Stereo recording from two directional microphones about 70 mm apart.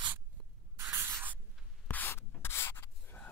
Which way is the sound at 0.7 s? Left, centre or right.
Right.